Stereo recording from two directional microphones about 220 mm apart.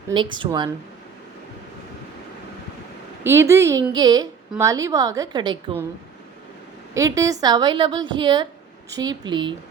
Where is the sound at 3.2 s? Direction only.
10° right (ahead or behind).